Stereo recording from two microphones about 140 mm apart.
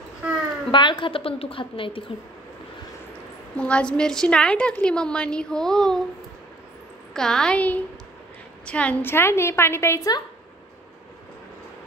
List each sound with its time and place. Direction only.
0.7 s a woman's voice: 35° left (ahead or behind)
3.5 s a woman's voice: 10° left (ahead or behind)
7.2 s a woman's voice: 5° left (ahead or behind); by 10.2 s 25° left (ahead or behind)